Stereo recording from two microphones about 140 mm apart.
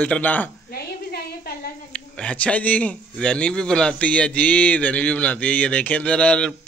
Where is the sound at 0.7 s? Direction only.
90° left.